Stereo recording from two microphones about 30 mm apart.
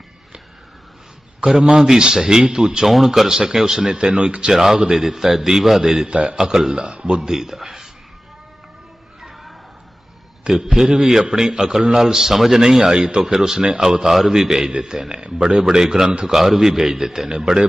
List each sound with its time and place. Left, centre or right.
1.5 s speech: right
2.8 s a man's voice: centre
3.2 s speech: right
3.9 s speech: right
4.5 s a man's voice: centre
6.1 s speech: right
6.4 s a man's voice: centre
6.7 s a man's voice: right
10.7 s a man's voice: centre
12.5 s speech: right
13.2 s a man's voice: centre